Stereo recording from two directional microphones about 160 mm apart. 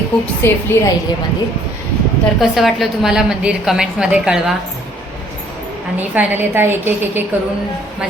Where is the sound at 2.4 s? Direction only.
Centre (ahead or behind).